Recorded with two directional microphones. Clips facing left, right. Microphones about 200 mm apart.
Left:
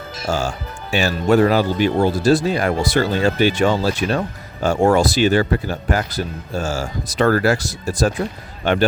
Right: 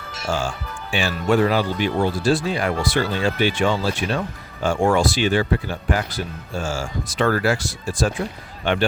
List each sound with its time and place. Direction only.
0.3 s speech: 40° left (ahead or behind)